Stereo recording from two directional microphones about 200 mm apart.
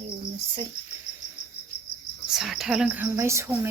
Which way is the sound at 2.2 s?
Centre (ahead or behind).